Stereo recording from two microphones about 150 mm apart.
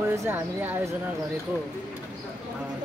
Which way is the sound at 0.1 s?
15° right (ahead or behind).